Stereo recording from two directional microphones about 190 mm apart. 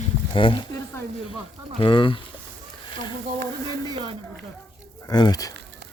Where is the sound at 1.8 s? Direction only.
25° left (ahead or behind).